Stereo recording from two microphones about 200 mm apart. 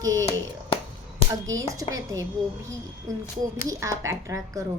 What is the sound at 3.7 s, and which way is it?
Speech, 15° right (ahead or behind).